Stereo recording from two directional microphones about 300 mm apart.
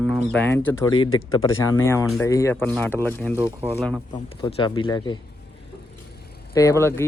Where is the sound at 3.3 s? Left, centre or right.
Centre.